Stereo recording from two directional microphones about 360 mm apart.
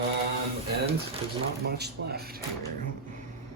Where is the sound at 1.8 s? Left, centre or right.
Right.